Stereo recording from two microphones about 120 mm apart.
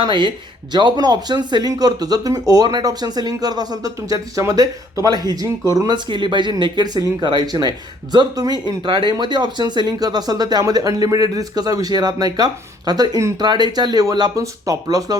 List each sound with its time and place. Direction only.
0.0 s speech: 45° right (ahead or behind)
6.1 s speech: 40° right (ahead or behind)